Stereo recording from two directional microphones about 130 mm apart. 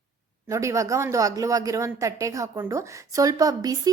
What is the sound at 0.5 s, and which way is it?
A woman's voice, 25° right (ahead or behind).